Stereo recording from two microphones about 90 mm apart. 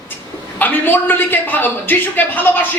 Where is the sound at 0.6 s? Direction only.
20° left (ahead or behind).